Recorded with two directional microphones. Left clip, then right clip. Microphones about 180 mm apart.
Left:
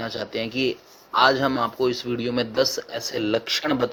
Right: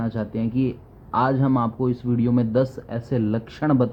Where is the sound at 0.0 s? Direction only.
20° left (ahead or behind).